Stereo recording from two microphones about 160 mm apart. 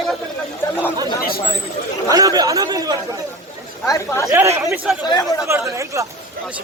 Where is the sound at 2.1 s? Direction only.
20° right (ahead or behind).